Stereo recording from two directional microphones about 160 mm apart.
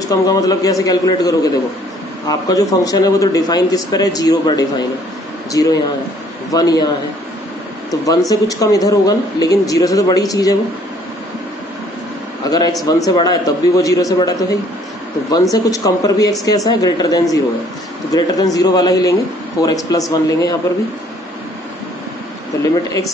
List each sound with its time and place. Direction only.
0.1 s a man's voice: 25° left (ahead or behind)
7.9 s a man's voice: 20° left (ahead or behind)
12.4 s a man's voice: 25° left (ahead or behind)